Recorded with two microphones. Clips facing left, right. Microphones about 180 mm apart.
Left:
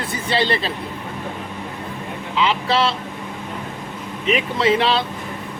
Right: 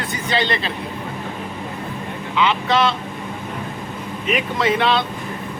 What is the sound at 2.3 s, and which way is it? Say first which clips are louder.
Speech: right 1 dB; 35° left (ahead or behind).